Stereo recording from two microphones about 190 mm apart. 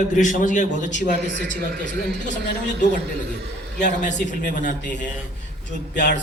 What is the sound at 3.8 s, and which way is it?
Speech, 40° left (ahead or behind).